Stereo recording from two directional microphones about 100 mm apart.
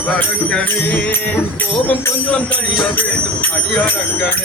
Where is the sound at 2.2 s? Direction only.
10° left (ahead or behind).